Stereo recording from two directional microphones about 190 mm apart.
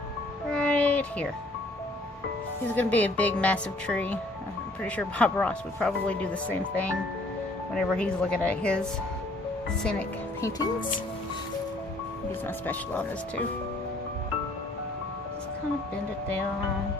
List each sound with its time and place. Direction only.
0.5 s a sound: 5° left (ahead or behind)
2.7 s speech: 10° left (ahead or behind)
10.4 s speech: 20° left (ahead or behind)
12.5 s speech: 10° left (ahead or behind)